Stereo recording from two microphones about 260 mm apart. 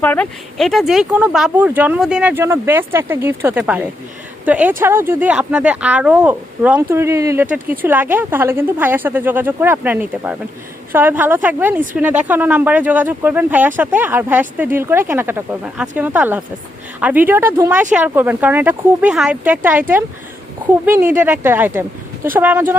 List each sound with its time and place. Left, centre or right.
0.0 s speech: centre
20.8 s speech: centre